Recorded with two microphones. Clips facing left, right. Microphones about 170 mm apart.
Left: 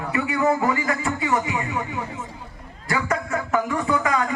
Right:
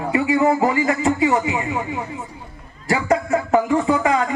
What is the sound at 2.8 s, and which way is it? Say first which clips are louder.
Speech: right 6 dB; 25° right (ahead or behind).